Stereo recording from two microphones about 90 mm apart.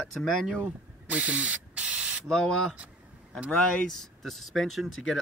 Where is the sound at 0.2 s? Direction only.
5° left (ahead or behind).